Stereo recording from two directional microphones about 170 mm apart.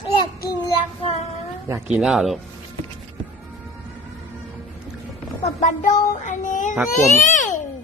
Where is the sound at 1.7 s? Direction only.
10° right (ahead or behind).